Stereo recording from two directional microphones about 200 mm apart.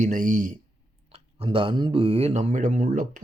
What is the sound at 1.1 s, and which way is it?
Speech, 30° right (ahead or behind).